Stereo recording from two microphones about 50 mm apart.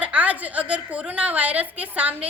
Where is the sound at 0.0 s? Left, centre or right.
Right.